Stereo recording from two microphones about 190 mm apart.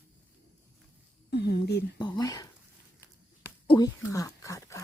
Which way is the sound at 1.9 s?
20° left (ahead or behind).